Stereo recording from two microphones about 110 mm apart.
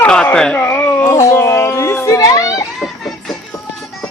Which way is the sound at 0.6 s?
20° left (ahead or behind).